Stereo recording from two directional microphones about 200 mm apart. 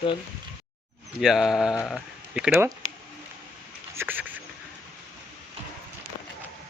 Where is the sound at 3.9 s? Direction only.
10° right (ahead or behind).